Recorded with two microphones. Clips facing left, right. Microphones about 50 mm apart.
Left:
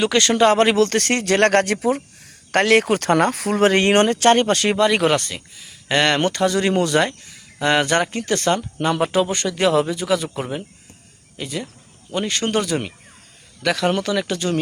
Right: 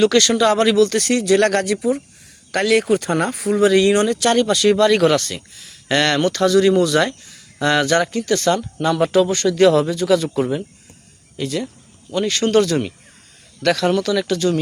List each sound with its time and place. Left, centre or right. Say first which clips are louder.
0.1 s speech: even; left
3.7 s speech: even; left
4.7 s speech: right 4 dB; left
5.3 s speech: right 2 dB; centre
6.0 s speech: right 1 dB; left
9.5 s speech: right 4 dB; centre
12.3 s speech: right 6 dB; left
13.8 s speech: right 2 dB; left